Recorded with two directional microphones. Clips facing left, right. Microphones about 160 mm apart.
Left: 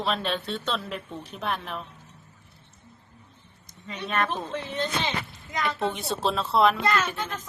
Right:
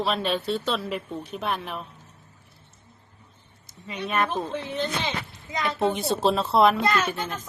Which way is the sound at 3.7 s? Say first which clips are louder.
Right 2 dB; 5° right (ahead or behind).